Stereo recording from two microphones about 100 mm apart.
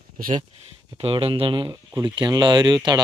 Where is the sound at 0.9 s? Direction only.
70° right (ahead or behind).